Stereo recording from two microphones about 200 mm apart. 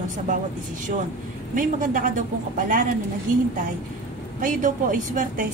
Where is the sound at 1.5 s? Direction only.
40° right (ahead or behind).